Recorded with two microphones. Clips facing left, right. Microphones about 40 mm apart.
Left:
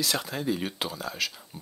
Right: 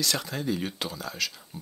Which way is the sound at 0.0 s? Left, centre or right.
Centre.